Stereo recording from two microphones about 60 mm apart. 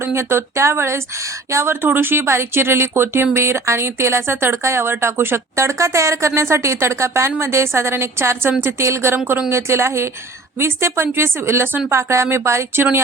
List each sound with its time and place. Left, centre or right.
0.0 s speech: right